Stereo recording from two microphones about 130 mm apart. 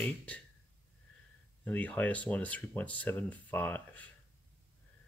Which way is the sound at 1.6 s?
10° left (ahead or behind).